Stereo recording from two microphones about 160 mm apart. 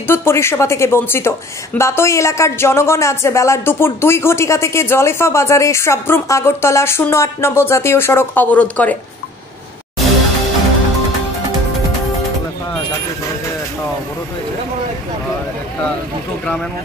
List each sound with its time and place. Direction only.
0.0 s speech: 15° left (ahead or behind)